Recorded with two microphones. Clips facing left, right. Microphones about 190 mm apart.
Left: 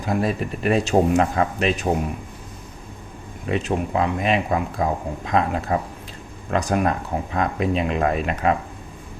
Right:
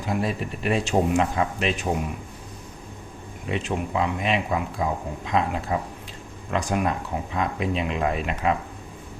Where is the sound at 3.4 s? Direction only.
40° left (ahead or behind).